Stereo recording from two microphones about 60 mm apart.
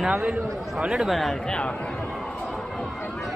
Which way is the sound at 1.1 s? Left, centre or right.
Centre.